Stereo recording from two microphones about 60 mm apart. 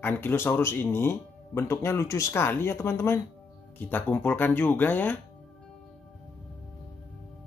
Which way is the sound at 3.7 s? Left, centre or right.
Left.